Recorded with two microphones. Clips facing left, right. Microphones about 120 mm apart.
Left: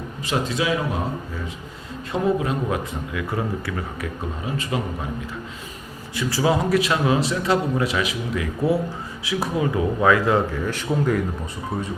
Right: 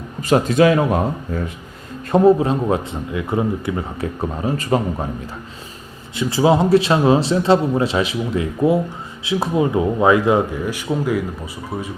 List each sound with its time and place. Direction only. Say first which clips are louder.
0.2 s a man's voice: right 10 dB; 45° right (ahead or behind)
2.1 s a man's voice: right 9 dB; 35° right (ahead or behind)
4.4 s a man's voice: right 7 dB; 40° right (ahead or behind)
6.1 s a man's voice: right 6 dB; 25° right (ahead or behind); by 11.9 s 5° right (ahead or behind)